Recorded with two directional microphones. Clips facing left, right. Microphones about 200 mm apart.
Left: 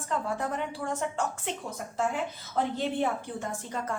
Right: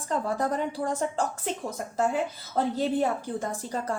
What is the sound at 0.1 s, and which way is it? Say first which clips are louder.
A woman's voice: right 4 dB; 35° right (ahead or behind).